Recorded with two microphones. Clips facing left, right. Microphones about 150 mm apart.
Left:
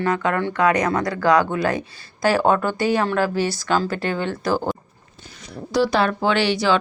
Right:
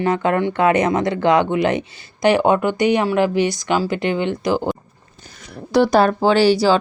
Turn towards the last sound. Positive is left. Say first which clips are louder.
# right 5 dB
turn(degrees=-35)  # may be behind; listen again after turning